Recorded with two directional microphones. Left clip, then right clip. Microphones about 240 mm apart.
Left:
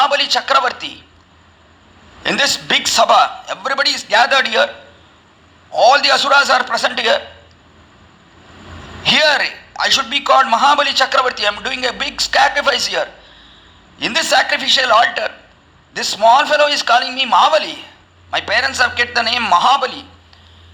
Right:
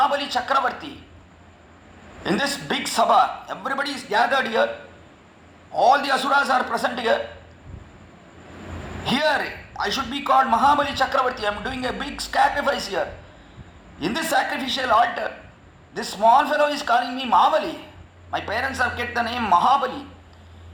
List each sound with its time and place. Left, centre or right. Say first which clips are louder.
0.0 s speech: left 7 dB; left
2.2 s a man's voice: left 8 dB; left
5.7 s a man's voice: left 7 dB; left
9.0 s a man's voice: left 9 dB; left